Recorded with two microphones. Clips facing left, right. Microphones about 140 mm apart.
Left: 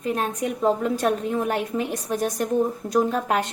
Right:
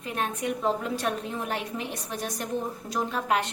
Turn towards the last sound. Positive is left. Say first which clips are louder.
# left 5 dB
turn(degrees=45)  # may be behind; listen again after turning